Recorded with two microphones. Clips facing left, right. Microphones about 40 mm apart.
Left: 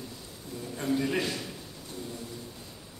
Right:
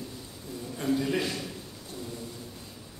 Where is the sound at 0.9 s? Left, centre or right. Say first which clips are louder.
Left 1 dB; centre.